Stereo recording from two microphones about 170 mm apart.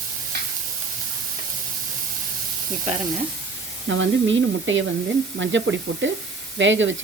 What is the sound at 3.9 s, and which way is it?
Speech, 90° right.